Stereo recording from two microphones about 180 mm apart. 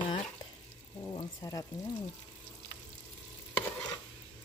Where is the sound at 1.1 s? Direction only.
20° left (ahead or behind).